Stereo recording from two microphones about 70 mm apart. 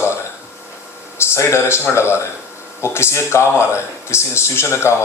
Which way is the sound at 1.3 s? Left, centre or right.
Left.